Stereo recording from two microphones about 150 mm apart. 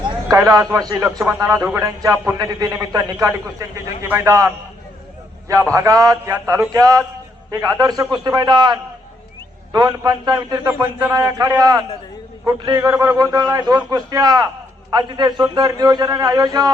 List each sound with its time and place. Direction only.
0.0 s a sound: 20° right (ahead or behind)
1.4 s a man's voice: 25° right (ahead or behind)
5.7 s a man's voice: 20° right (ahead or behind)